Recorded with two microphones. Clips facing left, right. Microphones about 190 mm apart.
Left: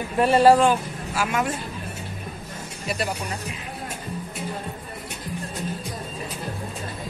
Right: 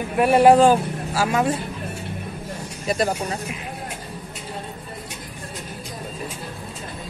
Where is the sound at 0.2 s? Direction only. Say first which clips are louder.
Right 2 dB; 15° right (ahead or behind).